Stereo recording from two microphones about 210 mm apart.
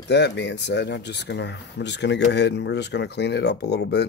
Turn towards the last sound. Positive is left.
turn(degrees=50)  # may be behind; listen again after turning